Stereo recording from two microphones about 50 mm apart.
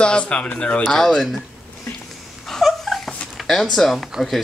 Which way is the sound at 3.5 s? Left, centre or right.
Centre.